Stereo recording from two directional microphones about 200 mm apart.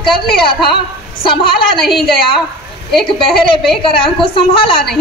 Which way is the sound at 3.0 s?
25° left (ahead or behind).